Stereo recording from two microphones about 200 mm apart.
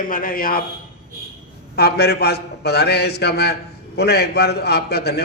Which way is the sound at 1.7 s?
55° left (ahead or behind).